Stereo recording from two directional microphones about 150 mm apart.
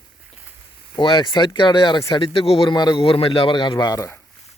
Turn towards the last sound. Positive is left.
turn(degrees=25)  # may be behind; listen again after turning